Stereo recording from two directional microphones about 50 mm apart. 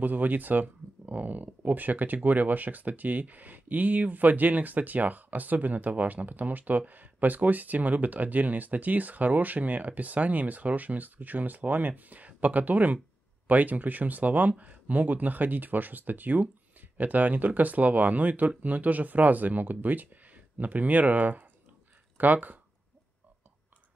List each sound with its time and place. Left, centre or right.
0.0 s speech: right